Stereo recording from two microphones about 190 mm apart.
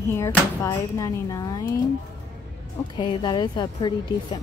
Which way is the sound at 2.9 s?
25° left (ahead or behind).